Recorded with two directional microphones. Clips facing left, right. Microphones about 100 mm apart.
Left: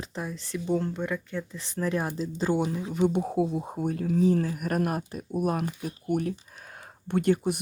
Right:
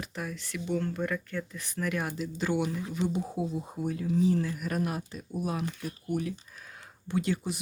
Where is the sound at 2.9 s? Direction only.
60° left (ahead or behind).